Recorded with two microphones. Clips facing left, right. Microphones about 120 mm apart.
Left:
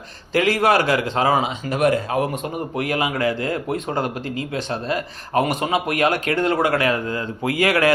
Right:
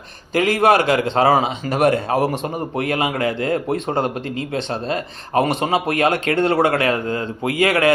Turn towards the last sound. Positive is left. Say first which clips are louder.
# right 2 dB
turn(degrees=-25)  # may be behind; listen again after turning